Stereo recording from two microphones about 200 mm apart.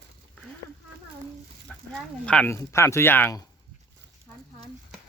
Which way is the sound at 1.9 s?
5° left (ahead or behind).